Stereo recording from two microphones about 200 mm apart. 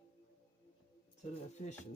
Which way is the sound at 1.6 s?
35° left (ahead or behind).